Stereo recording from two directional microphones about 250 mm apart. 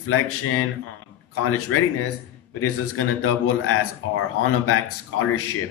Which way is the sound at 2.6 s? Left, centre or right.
Left.